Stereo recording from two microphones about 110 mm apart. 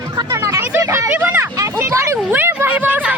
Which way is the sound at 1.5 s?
30° right (ahead or behind).